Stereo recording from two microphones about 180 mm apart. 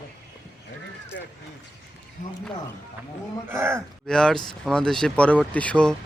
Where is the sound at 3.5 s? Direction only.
15° right (ahead or behind).